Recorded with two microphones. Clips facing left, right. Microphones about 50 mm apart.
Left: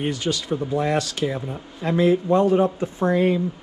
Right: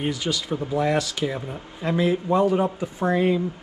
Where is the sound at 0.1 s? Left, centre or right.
Left.